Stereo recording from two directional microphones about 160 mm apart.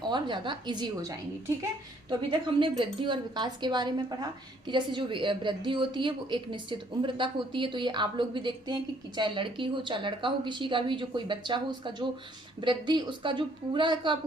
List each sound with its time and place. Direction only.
0.1 s a woman's voice: 30° right (ahead or behind)
2.6 s a woman's voice: 30° right (ahead or behind)